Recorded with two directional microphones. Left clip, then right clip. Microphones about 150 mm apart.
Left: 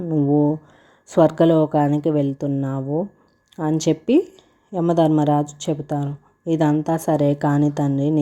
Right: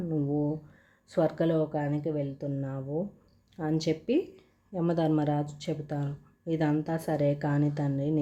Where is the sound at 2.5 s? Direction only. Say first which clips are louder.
Left 11 dB; 30° left (ahead or behind).